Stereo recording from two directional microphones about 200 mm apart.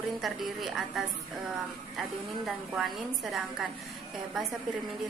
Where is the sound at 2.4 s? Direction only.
Centre (ahead or behind).